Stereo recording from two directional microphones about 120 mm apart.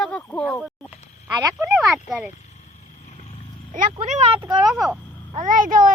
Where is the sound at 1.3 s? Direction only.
25° right (ahead or behind).